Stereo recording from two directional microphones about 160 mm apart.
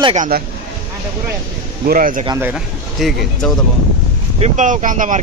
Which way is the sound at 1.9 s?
60° right (ahead or behind).